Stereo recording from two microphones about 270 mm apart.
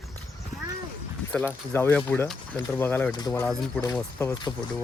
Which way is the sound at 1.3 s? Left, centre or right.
Centre.